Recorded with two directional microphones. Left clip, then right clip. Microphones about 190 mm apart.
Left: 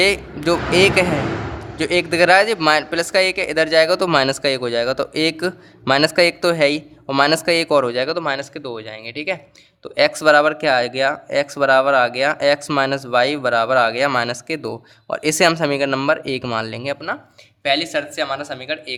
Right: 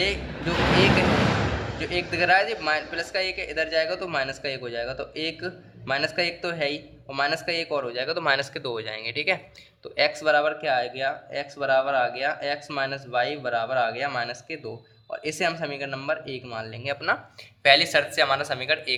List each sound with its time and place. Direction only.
0.0 s speech: 40° left (ahead or behind)
9.8 s speech: 40° left (ahead or behind)
17.6 s speech: 20° left (ahead or behind)